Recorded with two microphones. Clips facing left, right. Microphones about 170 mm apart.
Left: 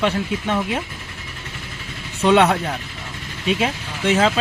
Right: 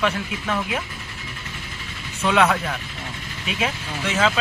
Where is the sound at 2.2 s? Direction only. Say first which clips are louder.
Left 4 dB; 30° left (ahead or behind).